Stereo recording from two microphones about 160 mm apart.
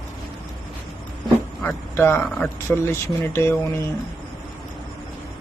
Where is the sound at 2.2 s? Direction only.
10° left (ahead or behind).